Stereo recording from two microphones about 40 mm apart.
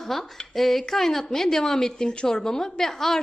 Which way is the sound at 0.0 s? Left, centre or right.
Centre.